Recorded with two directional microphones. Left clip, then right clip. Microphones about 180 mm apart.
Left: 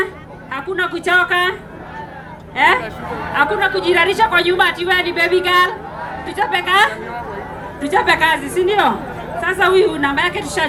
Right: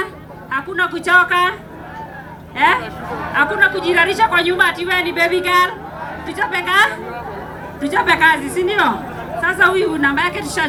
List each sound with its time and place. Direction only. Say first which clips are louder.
0.5 s a man's voice: right 1 dB; 15° left (ahead or behind)
2.6 s a man's voice: left 1 dB; 15° left (ahead or behind)